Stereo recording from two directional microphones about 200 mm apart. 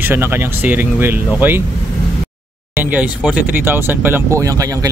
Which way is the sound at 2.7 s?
10° right (ahead or behind).